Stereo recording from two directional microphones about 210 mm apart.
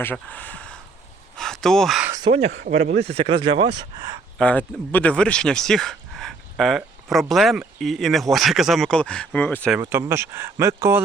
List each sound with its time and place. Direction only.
0.0 s speech: 10° left (ahead or behind)
2.0 s speech: 20° right (ahead or behind)
2.6 s speech: 35° right (ahead or behind); by 4.2 s 20° right (ahead or behind)
4.4 s speech: 5° left (ahead or behind)
9.8 s speech: 10° right (ahead or behind)